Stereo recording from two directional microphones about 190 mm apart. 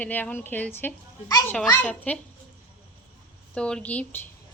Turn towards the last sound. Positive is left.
turn(degrees=10)  # may be behind; listen again after turning